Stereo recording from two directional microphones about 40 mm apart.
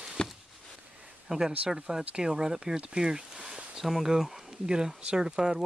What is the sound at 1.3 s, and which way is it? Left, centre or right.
Speech, centre.